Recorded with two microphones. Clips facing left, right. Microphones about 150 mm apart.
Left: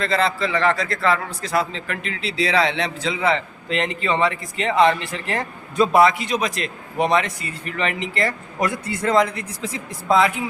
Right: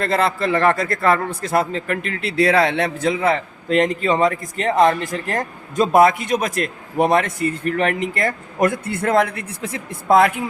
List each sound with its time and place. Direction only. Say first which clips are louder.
0.0 s a man's voice: right 2 dB; 55° right (ahead or behind)